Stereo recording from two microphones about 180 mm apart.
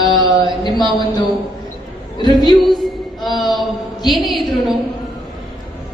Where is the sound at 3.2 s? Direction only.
Centre (ahead or behind).